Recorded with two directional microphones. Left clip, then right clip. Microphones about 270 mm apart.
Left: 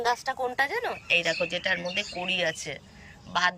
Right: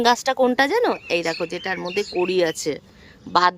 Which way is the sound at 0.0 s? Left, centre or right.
Right.